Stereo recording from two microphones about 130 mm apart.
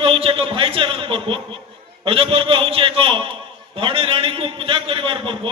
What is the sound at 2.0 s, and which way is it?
A man's voice, 45° right (ahead or behind).